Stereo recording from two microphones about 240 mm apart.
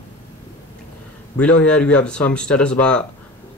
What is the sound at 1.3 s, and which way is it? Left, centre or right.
Speech, centre.